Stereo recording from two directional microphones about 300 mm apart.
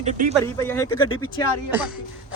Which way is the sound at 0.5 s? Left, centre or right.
Centre.